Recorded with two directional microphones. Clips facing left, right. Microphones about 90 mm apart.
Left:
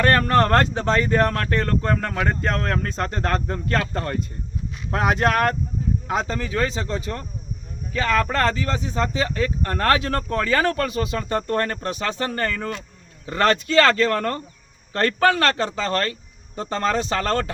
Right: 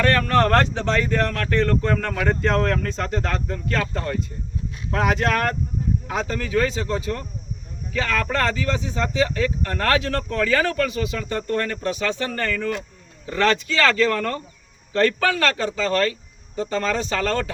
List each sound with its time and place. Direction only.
0.0 s speech: 40° left (ahead or behind)